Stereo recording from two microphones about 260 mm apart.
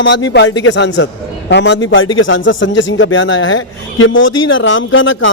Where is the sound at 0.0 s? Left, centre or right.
Left.